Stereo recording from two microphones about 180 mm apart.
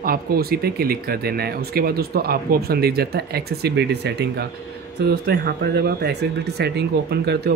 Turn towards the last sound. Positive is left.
turn(degrees=-65)  # may be behind; listen again after turning